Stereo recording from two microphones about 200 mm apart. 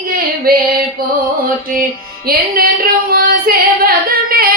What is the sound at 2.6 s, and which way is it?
Female singing, 50° right (ahead or behind).